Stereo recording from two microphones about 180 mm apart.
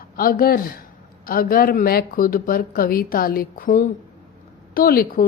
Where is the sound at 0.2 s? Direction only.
55° left (ahead or behind).